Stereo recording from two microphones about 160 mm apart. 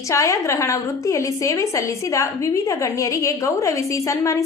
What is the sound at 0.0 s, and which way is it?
A woman's voice, 20° left (ahead or behind).